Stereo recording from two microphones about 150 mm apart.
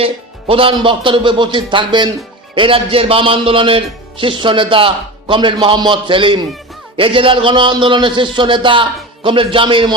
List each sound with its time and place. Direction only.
0.0 s a man's voice: 35° right (ahead or behind)